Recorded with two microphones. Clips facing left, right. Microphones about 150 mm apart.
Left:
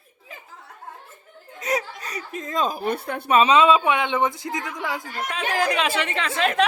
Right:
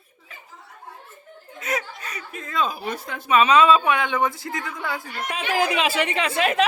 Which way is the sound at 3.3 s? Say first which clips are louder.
Even; 30° left (ahead or behind).